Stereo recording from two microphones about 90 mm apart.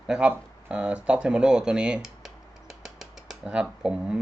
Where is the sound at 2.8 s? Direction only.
5° right (ahead or behind).